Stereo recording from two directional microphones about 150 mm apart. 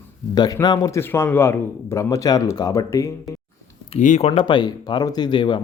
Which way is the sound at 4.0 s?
55° left (ahead or behind).